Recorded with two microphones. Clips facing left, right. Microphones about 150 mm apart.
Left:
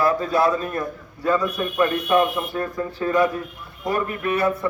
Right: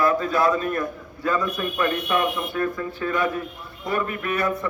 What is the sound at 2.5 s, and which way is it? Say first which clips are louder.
A man's voice: even; 35° left (ahead or behind).